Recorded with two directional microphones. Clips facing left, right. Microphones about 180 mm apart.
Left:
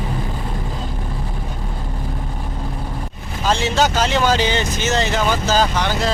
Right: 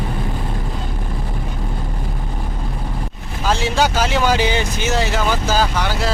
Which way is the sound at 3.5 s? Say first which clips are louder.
Even; 10° right (ahead or behind).